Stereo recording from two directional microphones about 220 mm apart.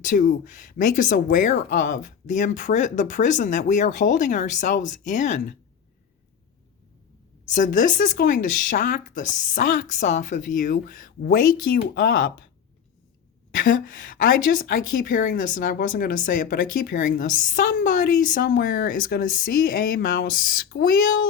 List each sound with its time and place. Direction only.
0.0 s a woman's voice: 35° left (ahead or behind)
7.5 s a woman's voice: 35° left (ahead or behind)
13.5 s a woman's voice: 40° left (ahead or behind)